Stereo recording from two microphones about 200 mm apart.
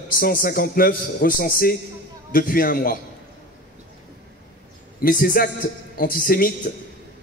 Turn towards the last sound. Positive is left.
turn(degrees=45)  # may be behind; listen again after turning